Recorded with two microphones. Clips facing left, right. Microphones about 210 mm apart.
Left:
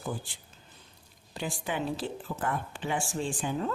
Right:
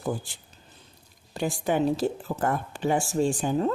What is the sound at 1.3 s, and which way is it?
Speech, 45° right (ahead or behind).